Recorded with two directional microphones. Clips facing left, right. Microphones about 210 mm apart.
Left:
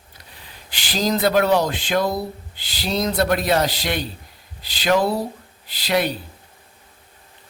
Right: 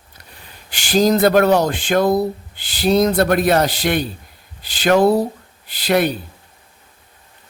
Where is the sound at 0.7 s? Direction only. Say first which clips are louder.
Right 7 dB; 50° right (ahead or behind).